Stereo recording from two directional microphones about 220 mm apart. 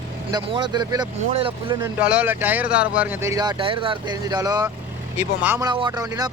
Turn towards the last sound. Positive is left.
turn(degrees=-15)  # may be behind; listen again after turning